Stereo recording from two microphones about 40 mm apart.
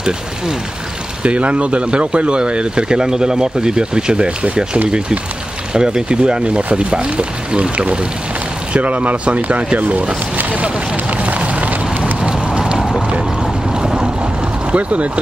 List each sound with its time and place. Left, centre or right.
1.2 s speech: right
5.7 s speech: centre; by 10.7 s right
11.2 s a sound: right
12.3 s clip-clop: right
13.8 s boat: right
14.7 s speech: right